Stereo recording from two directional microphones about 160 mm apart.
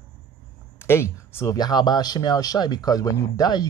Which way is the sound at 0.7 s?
15° left (ahead or behind).